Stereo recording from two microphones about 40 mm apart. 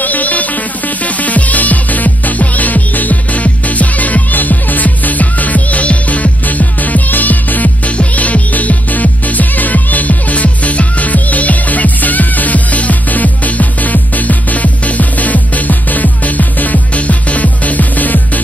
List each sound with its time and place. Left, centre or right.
0.0 s music: left